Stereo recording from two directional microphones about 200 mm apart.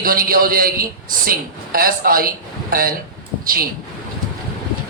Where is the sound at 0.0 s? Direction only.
45° right (ahead or behind).